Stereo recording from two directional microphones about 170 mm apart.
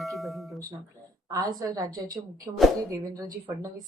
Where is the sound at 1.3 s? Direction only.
20° right (ahead or behind).